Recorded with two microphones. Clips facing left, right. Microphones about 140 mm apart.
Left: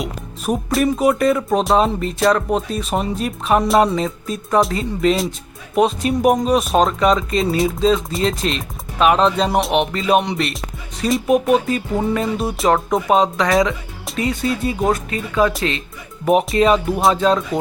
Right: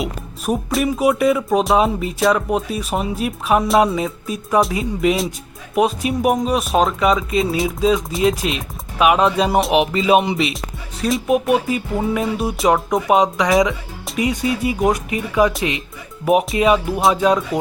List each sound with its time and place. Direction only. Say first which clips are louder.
0.0 s speech: right 1 dB; centre (ahead or behind)
13.1 s speech: right 1 dB; 15° right (ahead or behind)